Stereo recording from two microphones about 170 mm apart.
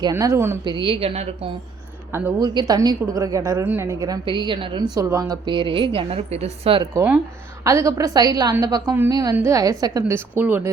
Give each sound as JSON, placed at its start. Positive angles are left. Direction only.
{"t": 0.0, "sound": "a woman's voice", "side_deg": -20}
{"t": 0.6, "sound": "a woman's voice", "side_deg": -30}
{"t": 2.1, "sound": "a woman's voice", "side_deg": -15}
{"t": 6.9, "sound": "a woman's voice", "side_deg": -10}